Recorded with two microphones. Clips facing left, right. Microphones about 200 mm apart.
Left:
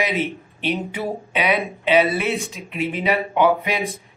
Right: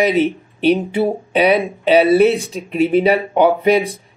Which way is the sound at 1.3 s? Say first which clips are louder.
Right 7 dB; 40° right (ahead or behind).